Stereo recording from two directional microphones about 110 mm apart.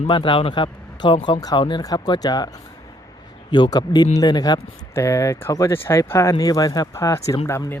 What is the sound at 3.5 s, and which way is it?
Speech, 40° left (ahead or behind).